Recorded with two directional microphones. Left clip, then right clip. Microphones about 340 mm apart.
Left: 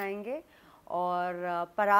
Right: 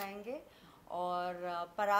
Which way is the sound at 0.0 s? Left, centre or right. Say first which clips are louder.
Left 7 dB; left.